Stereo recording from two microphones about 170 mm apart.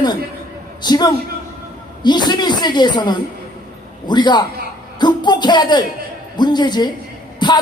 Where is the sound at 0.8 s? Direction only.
25° left (ahead or behind).